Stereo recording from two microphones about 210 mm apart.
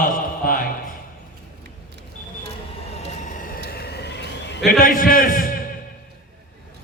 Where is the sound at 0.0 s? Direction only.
40° left (ahead or behind).